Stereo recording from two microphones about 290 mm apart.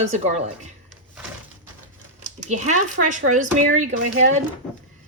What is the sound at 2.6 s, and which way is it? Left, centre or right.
Speech, right.